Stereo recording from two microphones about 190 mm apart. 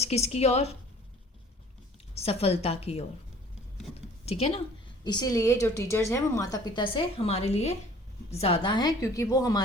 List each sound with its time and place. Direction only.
0.0 s a woman's voice: 35° left (ahead or behind)
2.1 s a woman's voice: 30° left (ahead or behind)
4.3 s a woman's voice: 30° left (ahead or behind)
5.0 s a woman's voice: 20° left (ahead or behind)